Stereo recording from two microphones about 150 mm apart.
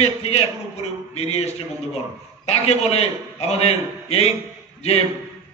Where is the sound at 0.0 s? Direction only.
40° left (ahead or behind).